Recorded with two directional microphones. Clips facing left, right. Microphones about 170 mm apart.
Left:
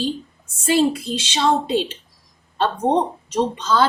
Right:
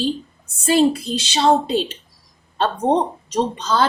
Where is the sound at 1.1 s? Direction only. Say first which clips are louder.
Right 3 dB; 40° right (ahead or behind).